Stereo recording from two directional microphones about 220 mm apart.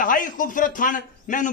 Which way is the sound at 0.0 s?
35° left (ahead or behind).